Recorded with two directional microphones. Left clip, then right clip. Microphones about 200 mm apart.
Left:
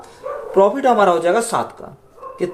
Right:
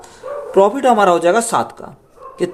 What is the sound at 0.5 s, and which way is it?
Speech, 40° right (ahead or behind).